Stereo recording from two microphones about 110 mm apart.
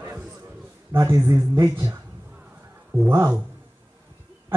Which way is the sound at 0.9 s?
25° right (ahead or behind).